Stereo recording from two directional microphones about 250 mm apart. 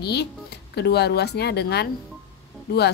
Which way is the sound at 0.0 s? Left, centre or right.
Left.